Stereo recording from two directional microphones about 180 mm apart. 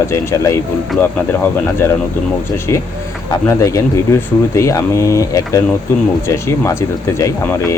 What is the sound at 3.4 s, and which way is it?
Speech, 15° left (ahead or behind).